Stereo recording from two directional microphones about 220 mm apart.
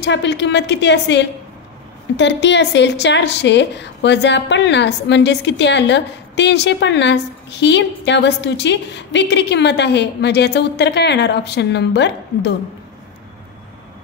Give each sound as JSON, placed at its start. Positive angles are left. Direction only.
{"t": 0.0, "sound": "a woman's voice", "side_deg": 50}